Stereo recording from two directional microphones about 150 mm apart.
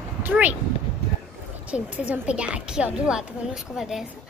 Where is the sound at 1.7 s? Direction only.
5° right (ahead or behind).